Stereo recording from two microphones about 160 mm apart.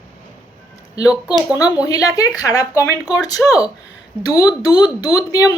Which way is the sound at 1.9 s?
20° left (ahead or behind).